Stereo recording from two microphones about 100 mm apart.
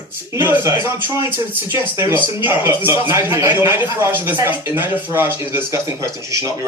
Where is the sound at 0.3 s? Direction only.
20° right (ahead or behind).